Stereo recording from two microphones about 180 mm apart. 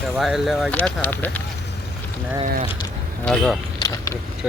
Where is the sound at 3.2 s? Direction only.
Centre (ahead or behind).